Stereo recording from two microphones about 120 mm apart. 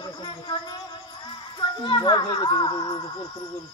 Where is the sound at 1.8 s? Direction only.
40° left (ahead or behind).